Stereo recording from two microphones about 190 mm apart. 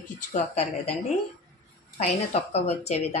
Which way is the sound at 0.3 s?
35° left (ahead or behind).